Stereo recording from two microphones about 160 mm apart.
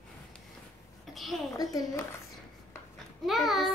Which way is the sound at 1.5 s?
25° left (ahead or behind).